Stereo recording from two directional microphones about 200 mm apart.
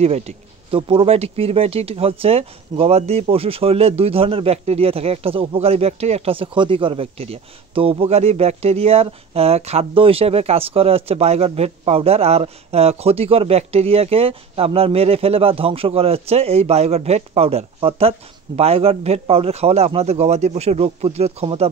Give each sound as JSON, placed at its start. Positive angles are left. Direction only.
{"t": 0.0, "sound": "a man's voice", "side_deg": -30}